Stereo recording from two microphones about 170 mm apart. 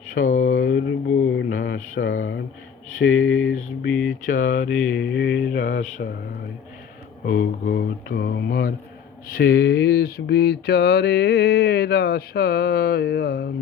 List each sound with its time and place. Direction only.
0.1 s mantra: 50° left (ahead or behind)
0.6 s mantra: 90° left
1.5 s mantra: 55° left (ahead or behind)
3.0 s a sound: 75° left (ahead or behind)
3.5 s mantra: 5° left (ahead or behind)
4.3 s speech: 55° left (ahead or behind)
4.9 s mantra: 90° left
7.3 s speech: 60° left (ahead or behind)
9.3 s a sound: 75° left (ahead or behind)